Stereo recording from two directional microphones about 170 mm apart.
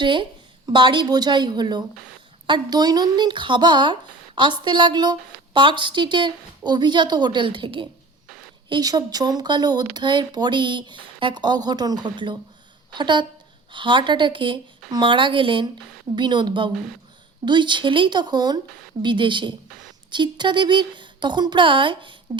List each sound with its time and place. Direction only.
0.0 s speech: 30° right (ahead or behind)